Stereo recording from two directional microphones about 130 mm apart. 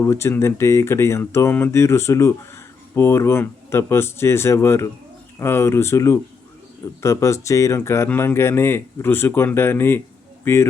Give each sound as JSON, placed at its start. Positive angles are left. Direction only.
{"t": 0.0, "sound": "speech", "side_deg": 20}